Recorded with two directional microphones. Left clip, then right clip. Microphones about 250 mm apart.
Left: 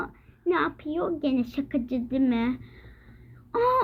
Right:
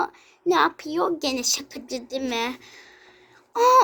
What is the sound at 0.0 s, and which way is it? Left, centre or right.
A child's voice, right.